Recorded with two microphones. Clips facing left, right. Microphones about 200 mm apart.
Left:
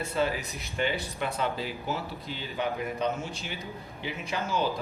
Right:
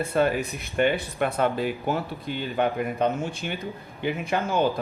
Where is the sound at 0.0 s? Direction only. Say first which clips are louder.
Right 6 dB; 55° right (ahead or behind).